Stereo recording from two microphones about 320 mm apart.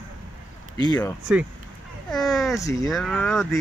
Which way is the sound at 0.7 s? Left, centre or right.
Centre.